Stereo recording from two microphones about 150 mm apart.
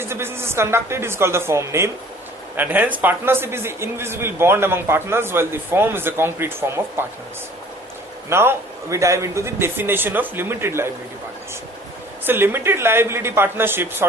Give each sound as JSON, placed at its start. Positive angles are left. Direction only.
{"t": 0.0, "sound": "a man's voice", "side_deg": -15}
{"t": 8.3, "sound": "a man's voice", "side_deg": -15}
{"t": 12.2, "sound": "a man's voice", "side_deg": -15}